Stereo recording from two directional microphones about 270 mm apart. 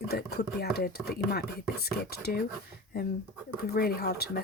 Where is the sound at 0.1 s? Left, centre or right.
Left.